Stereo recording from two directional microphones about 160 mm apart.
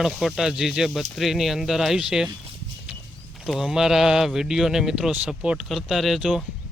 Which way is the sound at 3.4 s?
Centre (ahead or behind).